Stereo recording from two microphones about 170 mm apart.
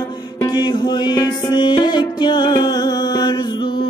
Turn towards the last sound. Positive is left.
turn(degrees=25)  # may be behind; listen again after turning